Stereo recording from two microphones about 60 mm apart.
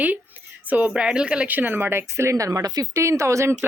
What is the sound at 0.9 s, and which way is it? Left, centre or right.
Speech, centre.